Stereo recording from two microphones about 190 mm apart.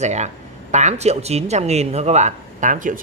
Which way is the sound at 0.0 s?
35° right (ahead or behind).